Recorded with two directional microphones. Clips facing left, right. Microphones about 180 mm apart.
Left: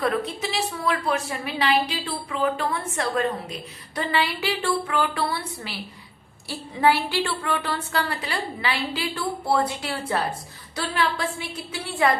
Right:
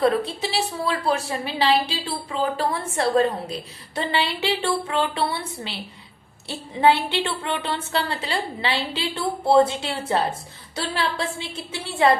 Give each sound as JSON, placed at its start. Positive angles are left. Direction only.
{"t": 0.0, "sound": "a woman's voice", "side_deg": -30}